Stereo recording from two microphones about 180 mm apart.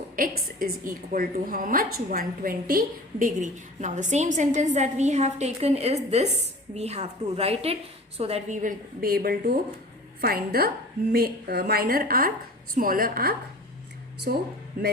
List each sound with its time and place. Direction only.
0.2 s a woman's voice: 55° right (ahead or behind)